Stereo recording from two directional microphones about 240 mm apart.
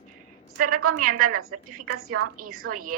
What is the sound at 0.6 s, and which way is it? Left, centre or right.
A woman's voice, right.